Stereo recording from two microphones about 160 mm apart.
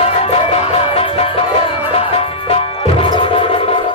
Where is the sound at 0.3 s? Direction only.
35° left (ahead or behind).